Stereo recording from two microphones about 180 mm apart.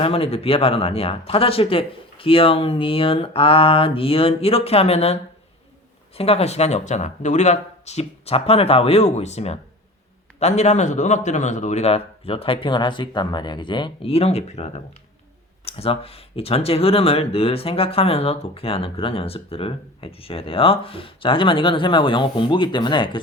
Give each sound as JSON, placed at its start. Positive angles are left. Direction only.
{"t": 0.0, "sound": "speech", "side_deg": 30}